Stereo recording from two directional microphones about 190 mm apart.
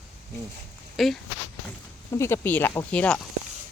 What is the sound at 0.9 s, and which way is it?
Speech, centre (ahead or behind).